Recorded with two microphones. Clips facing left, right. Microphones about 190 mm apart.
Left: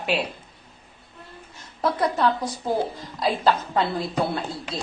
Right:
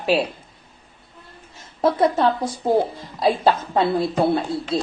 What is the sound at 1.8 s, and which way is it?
A man's voice, 25° right (ahead or behind).